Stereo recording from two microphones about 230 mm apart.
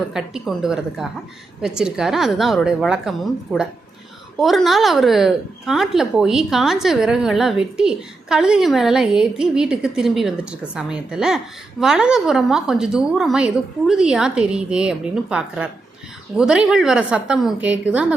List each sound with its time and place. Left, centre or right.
0.1 s a woman's voice: centre